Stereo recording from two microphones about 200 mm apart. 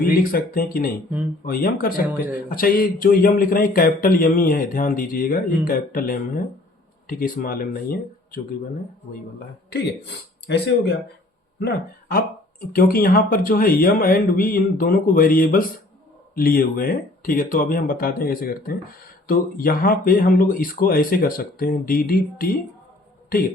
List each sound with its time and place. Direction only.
0.0 s speech: 45° left (ahead or behind)
2.0 s speech: 10° right (ahead or behind)
2.6 s speech: 45° left (ahead or behind)
11.6 s speech: 50° left (ahead or behind)